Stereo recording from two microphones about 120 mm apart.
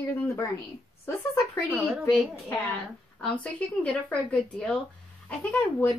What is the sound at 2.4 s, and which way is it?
A woman's voice, 10° left (ahead or behind).